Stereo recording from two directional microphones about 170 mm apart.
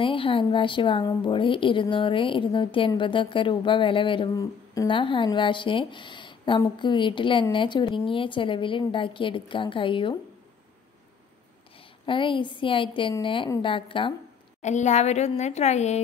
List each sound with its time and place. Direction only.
0.0 s a woman's voice: 30° left (ahead or behind)
12.1 s a woman's voice: 30° left (ahead or behind)
14.6 s a woman's voice: 45° left (ahead or behind)